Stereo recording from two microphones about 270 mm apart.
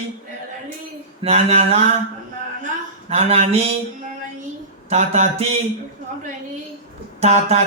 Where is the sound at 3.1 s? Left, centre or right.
Right.